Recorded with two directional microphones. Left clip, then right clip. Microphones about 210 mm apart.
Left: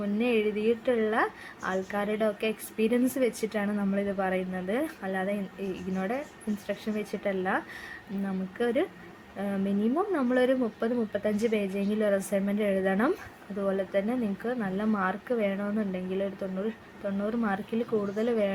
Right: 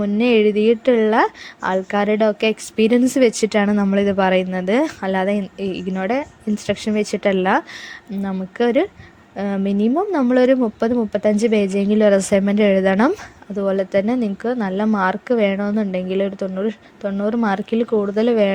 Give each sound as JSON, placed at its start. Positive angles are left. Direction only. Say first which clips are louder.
{"t": 0.0, "sound": "a woman's voice", "louder": "right 12 dB", "side_deg": -40}